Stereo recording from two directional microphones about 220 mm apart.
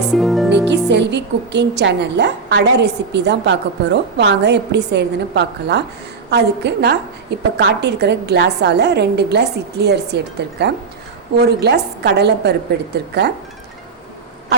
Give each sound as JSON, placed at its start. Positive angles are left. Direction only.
{"t": 0.1, "sound": "music", "side_deg": 0}
{"t": 0.5, "sound": "speech", "side_deg": -50}